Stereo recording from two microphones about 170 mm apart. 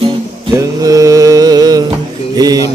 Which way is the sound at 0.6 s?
20° right (ahead or behind).